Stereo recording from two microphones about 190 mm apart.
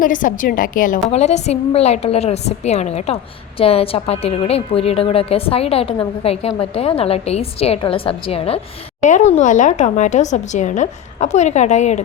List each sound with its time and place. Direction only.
0.0 s a woman's voice: 45° left (ahead or behind)